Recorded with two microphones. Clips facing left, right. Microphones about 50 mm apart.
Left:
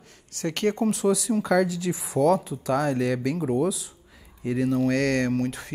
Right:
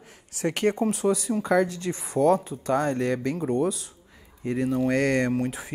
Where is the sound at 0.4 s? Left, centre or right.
Centre.